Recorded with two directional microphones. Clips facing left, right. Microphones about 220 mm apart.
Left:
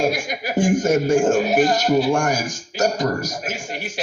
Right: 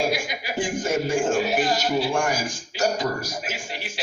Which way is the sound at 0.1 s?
45° left (ahead or behind).